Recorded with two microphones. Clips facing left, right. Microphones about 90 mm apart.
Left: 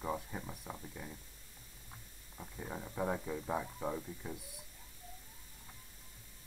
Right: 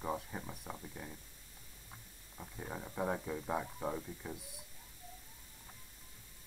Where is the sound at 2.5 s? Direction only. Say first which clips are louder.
Even; 10° right (ahead or behind).